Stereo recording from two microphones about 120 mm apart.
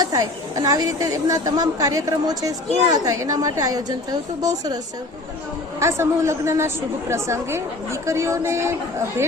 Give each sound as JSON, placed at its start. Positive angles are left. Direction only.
{"t": 0.0, "sound": "a woman's voice", "side_deg": -30}
{"t": 5.8, "sound": "a woman's voice", "side_deg": -25}